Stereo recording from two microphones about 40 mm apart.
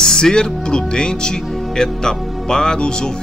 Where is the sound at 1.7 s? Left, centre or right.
Centre.